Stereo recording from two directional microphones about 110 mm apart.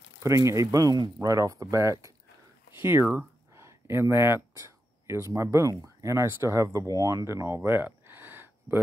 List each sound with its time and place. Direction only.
0.2 s speech: 30° right (ahead or behind)
3.5 s a sound: 25° right (ahead or behind)
5.3 s speech: 25° right (ahead or behind)